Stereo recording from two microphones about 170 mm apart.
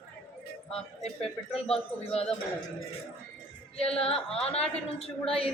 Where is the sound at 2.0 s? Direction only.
35° left (ahead or behind).